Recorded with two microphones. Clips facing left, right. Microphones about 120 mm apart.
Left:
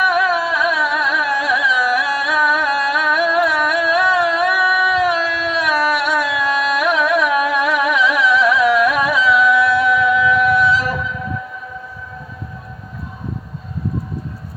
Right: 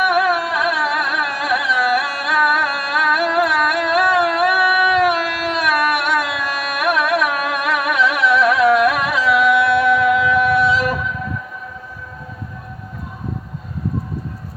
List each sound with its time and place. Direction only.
0.0 s carnatic music: 60° right (ahead or behind)